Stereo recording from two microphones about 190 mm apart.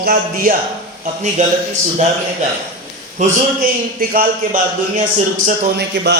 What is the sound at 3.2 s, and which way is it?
A man's voice, 40° right (ahead or behind).